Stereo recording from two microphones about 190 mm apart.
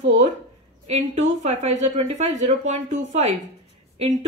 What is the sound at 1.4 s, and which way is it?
Speech, 35° right (ahead or behind).